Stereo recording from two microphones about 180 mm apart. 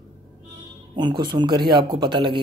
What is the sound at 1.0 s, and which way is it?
Speech, 25° right (ahead or behind).